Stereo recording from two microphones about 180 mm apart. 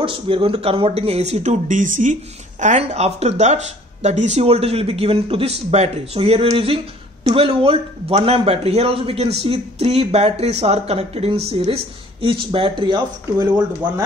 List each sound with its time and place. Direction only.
0.0 s speech: 30° right (ahead or behind)